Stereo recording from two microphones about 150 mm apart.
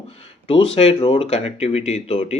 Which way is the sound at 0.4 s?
40° left (ahead or behind).